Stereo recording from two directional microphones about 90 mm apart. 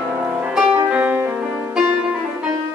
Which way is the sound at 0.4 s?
15° right (ahead or behind).